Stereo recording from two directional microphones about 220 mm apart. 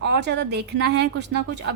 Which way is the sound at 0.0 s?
50° right (ahead or behind).